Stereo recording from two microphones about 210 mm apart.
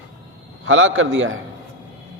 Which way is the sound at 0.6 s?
70° right (ahead or behind).